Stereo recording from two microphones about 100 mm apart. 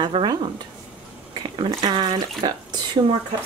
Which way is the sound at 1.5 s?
55° right (ahead or behind).